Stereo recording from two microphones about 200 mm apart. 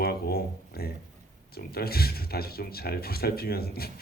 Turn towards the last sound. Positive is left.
turn(degrees=50)  # may be behind; listen again after turning